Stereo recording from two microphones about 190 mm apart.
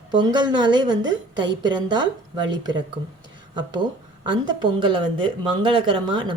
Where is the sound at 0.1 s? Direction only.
25° right (ahead or behind).